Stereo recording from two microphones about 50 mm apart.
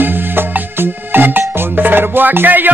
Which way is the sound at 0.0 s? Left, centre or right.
Right.